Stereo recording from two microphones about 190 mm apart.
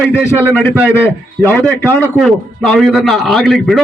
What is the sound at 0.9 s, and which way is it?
A man's voice, 10° left (ahead or behind).